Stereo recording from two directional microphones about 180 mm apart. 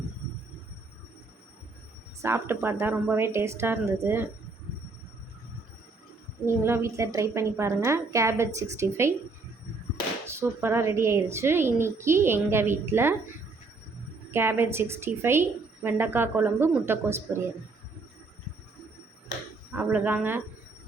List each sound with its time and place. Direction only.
2.2 s a woman's voice: 15° right (ahead or behind)
6.4 s a woman's voice: 15° right (ahead or behind)
10.2 s a woman's voice: 15° right (ahead or behind)
14.3 s a woman's voice: 15° right (ahead or behind)
19.7 s a woman's voice: 5° right (ahead or behind)